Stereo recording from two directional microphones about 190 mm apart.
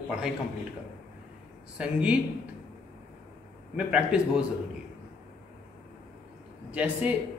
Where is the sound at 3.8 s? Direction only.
5° right (ahead or behind).